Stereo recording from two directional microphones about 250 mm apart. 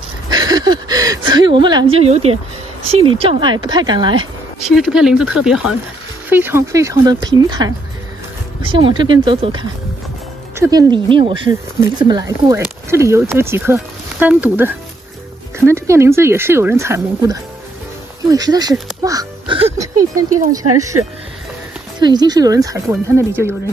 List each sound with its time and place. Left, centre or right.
0.3 s a sound: centre
2.9 s speech: right
4.6 s speech: centre
22.0 s speech: centre